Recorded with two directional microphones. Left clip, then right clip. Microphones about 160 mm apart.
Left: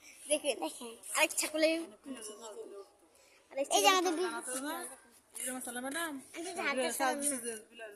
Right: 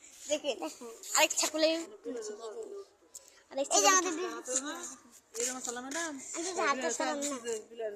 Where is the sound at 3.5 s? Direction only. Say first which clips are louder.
Right 1 dB; 5° right (ahead or behind).